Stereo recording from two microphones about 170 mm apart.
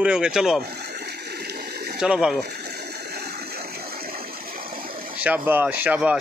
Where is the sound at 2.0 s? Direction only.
5° right (ahead or behind).